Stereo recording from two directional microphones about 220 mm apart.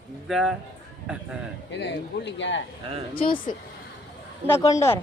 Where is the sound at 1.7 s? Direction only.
50° left (ahead or behind).